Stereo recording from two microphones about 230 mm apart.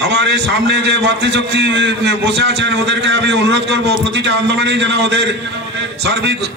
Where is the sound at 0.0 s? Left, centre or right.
Right.